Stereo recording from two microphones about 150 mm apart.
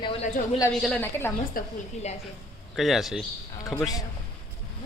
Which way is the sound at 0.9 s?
15° left (ahead or behind).